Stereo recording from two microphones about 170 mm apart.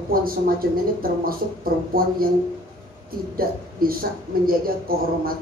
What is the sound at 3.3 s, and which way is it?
Speech, 60° right (ahead or behind).